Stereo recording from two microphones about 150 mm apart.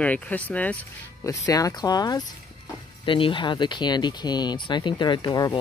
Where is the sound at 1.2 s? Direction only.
20° left (ahead or behind).